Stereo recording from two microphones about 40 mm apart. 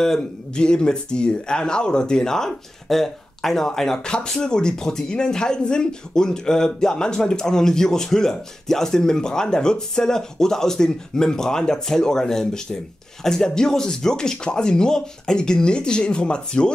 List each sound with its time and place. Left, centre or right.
0.0 s speech: centre